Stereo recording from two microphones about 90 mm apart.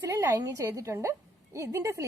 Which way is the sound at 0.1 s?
35° right (ahead or behind).